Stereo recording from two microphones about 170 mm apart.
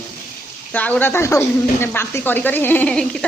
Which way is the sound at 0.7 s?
10° left (ahead or behind).